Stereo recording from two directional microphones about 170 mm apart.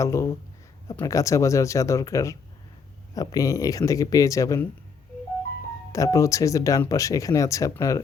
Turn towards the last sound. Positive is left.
turn(degrees=20)  # may be behind; listen again after turning